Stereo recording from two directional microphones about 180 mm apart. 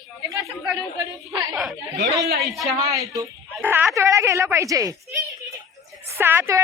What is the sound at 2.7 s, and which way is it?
A woman's voice, 20° right (ahead or behind).